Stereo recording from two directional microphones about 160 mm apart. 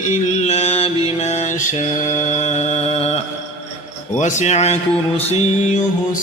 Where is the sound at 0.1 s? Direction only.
40° left (ahead or behind).